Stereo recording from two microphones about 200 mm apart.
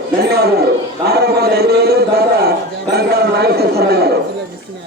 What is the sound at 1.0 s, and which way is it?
A man's voice, 55° right (ahead or behind).